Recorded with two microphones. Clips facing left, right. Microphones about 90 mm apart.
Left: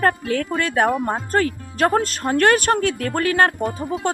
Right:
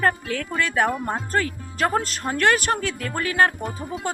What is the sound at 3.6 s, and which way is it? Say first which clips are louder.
Speech: left 6 dB; centre (ahead or behind).